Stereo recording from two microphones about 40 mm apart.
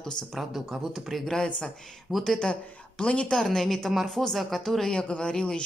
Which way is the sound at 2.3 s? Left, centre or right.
Left.